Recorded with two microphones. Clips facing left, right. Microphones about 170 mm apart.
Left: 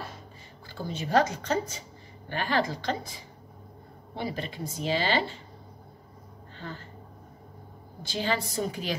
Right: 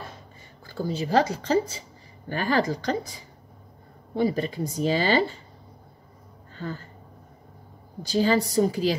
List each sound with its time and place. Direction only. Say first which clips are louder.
0.7 s speech: right 5 dB; 35° right (ahead or behind)
2.2 s speech: right 4 dB; 40° right (ahead or behind)
6.5 s speech: right 6 dB; 45° right (ahead or behind)
8.0 s speech: right 8 dB; 40° right (ahead or behind)